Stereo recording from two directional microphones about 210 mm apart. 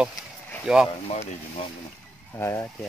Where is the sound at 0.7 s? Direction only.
5° right (ahead or behind).